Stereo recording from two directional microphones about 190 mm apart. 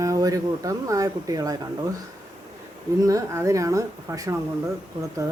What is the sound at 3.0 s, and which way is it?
Speech, 15° right (ahead or behind).